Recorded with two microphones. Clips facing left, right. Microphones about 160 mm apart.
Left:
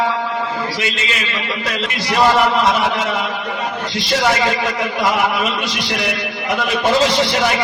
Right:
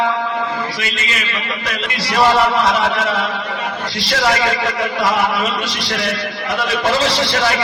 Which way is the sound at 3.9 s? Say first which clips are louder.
Left 1 dB; 20° left (ahead or behind).